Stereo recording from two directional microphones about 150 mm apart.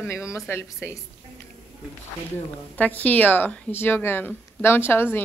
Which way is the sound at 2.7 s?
10° left (ahead or behind).